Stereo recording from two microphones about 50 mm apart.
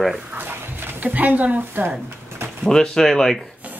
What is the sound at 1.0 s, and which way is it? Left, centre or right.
Speech, right.